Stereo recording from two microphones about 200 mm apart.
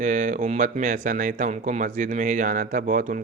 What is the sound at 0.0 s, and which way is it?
Speech, 40° right (ahead or behind).